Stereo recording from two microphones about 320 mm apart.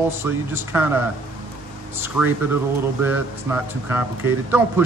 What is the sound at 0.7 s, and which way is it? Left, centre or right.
Speech, centre.